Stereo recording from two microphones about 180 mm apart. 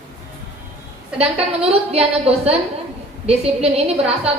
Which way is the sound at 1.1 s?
35° right (ahead or behind).